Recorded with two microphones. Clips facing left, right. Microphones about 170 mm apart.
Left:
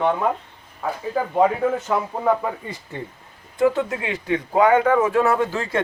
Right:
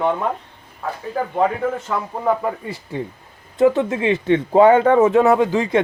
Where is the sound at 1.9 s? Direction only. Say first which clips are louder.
Left 2 dB; 5° left (ahead or behind).